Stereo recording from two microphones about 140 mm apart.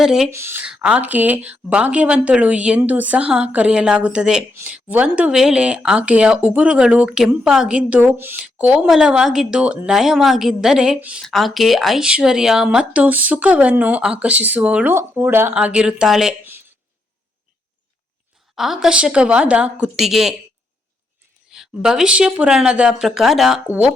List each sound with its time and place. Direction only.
0.0 s speech: 5° right (ahead or behind)
0.3 s speech: 20° right (ahead or behind)
0.6 s speech: 5° right (ahead or behind)
16.4 s a sound: 15° right (ahead or behind)
18.5 s speech: centre (ahead or behind)
21.5 s speech: 5° right (ahead or behind)